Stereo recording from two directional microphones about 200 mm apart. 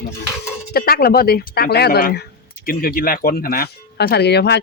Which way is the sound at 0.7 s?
50° left (ahead or behind).